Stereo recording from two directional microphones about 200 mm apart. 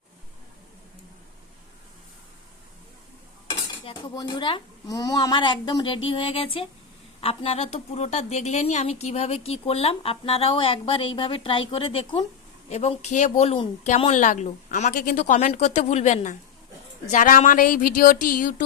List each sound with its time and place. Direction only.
3.4 s a child's voice: 20° left (ahead or behind); by 18.6 s 40° left (ahead or behind)